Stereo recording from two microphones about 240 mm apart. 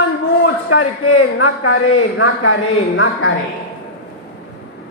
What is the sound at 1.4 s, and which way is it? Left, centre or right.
A woman's voice, left.